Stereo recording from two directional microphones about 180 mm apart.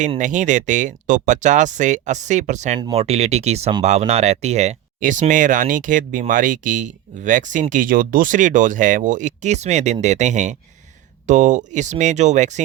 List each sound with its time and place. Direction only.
0.2 s speech: 45° right (ahead or behind)